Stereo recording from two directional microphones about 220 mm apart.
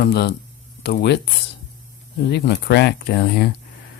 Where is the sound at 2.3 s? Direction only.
50° left (ahead or behind).